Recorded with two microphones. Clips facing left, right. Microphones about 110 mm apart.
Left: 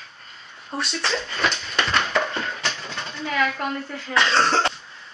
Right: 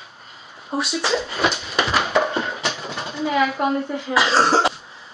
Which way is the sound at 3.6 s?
15° right (ahead or behind).